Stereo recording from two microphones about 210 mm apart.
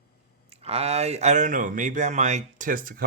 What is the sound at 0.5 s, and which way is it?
Speech, 30° right (ahead or behind).